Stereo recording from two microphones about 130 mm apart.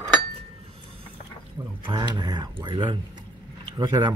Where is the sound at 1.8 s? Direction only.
35° right (ahead or behind).